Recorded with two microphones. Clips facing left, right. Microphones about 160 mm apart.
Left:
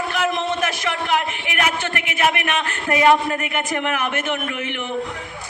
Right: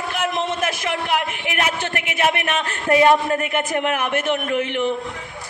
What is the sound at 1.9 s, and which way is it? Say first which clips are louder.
A man's voice: right 1 dB; 35° right (ahead or behind).